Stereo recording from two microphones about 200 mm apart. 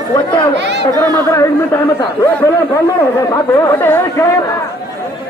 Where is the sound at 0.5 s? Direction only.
60° right (ahead or behind).